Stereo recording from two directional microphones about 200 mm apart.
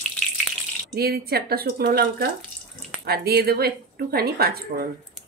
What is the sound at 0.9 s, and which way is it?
A woman's voice, 50° right (ahead or behind).